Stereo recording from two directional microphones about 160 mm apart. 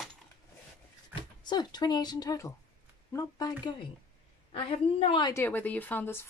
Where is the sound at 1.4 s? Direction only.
25° left (ahead or behind).